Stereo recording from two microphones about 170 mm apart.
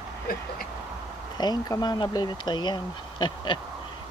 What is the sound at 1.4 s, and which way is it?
Speech, 25° left (ahead or behind).